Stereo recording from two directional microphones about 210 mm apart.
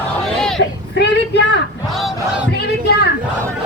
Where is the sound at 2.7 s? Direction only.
50° left (ahead or behind).